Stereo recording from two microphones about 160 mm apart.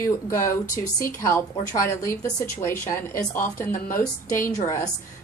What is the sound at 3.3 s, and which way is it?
Speech, 60° left (ahead or behind).